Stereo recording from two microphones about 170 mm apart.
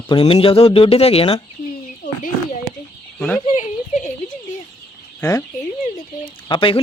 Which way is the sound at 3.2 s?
Centre (ahead or behind).